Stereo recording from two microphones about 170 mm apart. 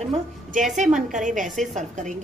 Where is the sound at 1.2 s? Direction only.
50° right (ahead or behind).